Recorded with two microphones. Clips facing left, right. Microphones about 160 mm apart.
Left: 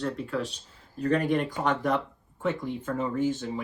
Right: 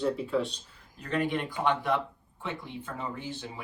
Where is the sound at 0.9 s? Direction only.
40° left (ahead or behind).